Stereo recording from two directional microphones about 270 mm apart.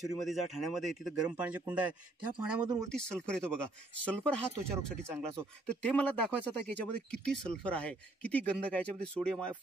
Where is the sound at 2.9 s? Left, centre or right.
Centre.